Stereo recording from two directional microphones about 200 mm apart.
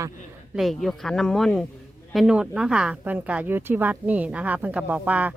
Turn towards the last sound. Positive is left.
turn(degrees=-5)  # may be behind; listen again after turning